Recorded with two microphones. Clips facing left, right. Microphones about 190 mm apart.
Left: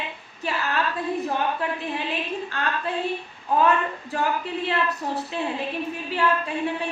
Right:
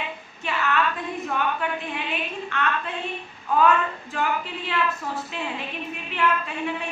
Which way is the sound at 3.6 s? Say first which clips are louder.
Right 1 dB; 35° left (ahead or behind).